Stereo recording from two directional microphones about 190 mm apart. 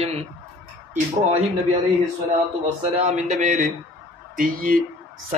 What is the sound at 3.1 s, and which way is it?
A man's voice, 40° right (ahead or behind).